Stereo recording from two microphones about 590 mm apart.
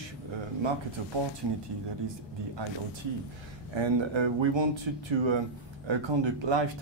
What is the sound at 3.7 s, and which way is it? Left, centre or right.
Speech, right.